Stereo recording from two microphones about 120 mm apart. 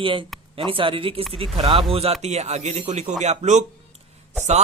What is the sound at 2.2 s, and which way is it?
A man's voice, 65° right (ahead or behind).